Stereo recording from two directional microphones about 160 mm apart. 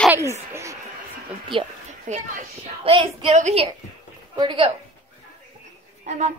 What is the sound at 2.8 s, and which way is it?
Speech, 35° right (ahead or behind).